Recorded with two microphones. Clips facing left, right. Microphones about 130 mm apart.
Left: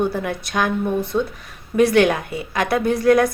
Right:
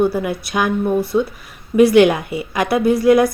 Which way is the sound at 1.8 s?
10° right (ahead or behind).